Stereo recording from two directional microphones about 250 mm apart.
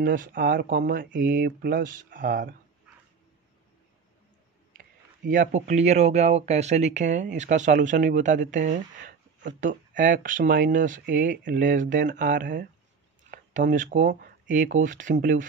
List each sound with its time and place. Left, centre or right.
0.0 s speech: right
4.7 s speech: right
13.3 s a sound: right
13.9 s speech: right